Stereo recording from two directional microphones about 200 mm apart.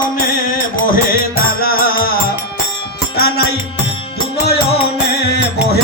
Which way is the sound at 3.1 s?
50° left (ahead or behind).